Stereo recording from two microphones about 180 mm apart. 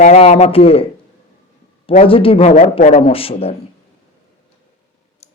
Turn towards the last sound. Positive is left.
turn(degrees=35)  # may be behind; listen again after turning